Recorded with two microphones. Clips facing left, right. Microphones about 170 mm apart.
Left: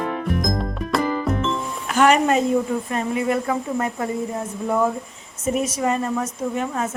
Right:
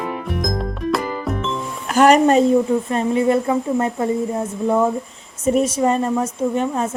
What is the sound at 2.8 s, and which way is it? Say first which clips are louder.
A woman's voice: right 5 dB; 30° right (ahead or behind).